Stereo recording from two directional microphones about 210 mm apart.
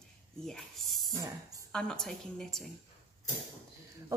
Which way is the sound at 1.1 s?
15° right (ahead or behind).